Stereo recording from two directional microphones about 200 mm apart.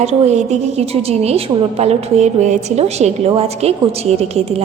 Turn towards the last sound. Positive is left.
turn(degrees=-30)  # may be behind; listen again after turning